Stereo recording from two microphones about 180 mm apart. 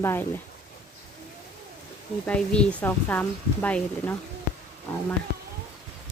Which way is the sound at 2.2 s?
5° left (ahead or behind).